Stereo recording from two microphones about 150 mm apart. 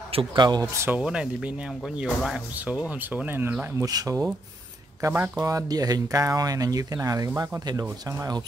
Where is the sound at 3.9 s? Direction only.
25° right (ahead or behind).